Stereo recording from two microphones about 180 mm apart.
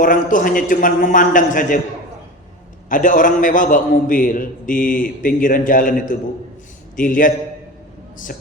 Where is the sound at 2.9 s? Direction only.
45° left (ahead or behind).